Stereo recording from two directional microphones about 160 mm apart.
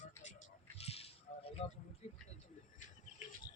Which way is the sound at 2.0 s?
45° left (ahead or behind).